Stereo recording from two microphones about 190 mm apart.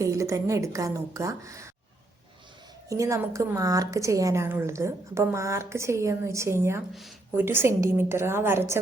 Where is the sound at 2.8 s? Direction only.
15° right (ahead or behind).